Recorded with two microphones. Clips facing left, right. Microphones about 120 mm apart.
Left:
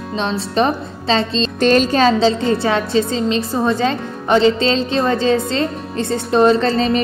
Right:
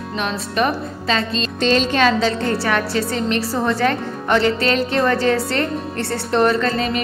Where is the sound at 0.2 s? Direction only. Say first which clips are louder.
Left 3 dB; 25° left (ahead or behind).